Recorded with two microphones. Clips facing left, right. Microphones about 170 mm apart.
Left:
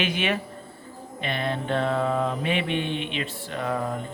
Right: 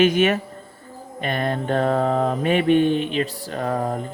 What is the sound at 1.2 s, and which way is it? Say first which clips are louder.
Mantra: right 4 dB; 45° right (ahead or behind).